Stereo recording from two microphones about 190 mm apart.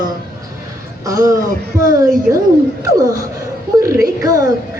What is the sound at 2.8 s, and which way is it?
A woman's voice, 15° right (ahead or behind).